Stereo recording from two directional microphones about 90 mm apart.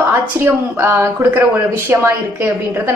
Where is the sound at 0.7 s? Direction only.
25° right (ahead or behind).